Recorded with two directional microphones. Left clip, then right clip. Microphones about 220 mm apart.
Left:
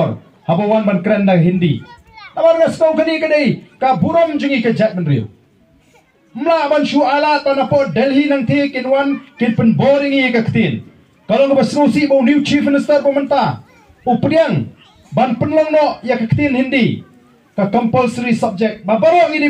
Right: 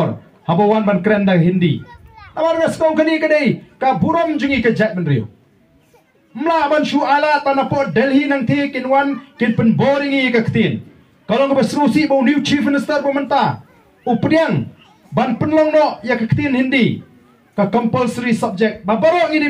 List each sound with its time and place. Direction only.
0.5 s a man's voice: 25° right (ahead or behind)
1.9 s a sound: 45° left (ahead or behind)
2.3 s a man's voice: 25° right (ahead or behind)
6.3 s a man's voice: 25° right (ahead or behind)